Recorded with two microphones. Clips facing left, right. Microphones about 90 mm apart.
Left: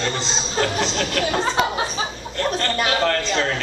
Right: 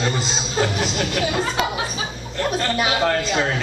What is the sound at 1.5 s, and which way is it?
Speech, 25° left (ahead or behind).